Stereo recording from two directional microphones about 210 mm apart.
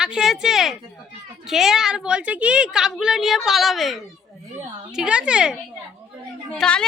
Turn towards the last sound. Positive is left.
turn(degrees=5)  # may be behind; listen again after turning